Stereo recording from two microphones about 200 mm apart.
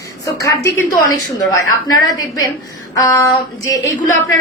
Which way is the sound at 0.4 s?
15° left (ahead or behind).